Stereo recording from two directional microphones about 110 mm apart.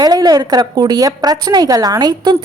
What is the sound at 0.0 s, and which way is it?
A woman's voice, 35° right (ahead or behind).